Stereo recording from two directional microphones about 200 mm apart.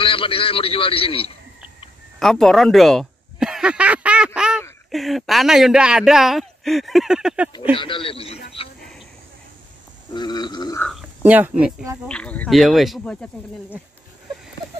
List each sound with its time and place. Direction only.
0.0 s a man's voice: 25° left (ahead or behind)
2.1 s a sound: centre (ahead or behind)
4.9 s speech: centre (ahead or behind)
7.7 s a man's voice: 25° left (ahead or behind)
10.1 s a man's voice: 20° left (ahead or behind)
10.8 s speech: centre (ahead or behind)
12.1 s speech: 5° left (ahead or behind)